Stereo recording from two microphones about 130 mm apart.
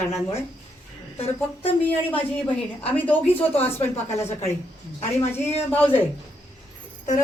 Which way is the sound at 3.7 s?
55° left (ahead or behind).